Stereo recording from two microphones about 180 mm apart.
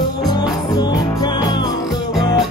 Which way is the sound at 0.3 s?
20° left (ahead or behind).